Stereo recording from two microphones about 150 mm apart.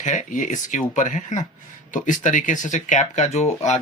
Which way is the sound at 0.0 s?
55° left (ahead or behind).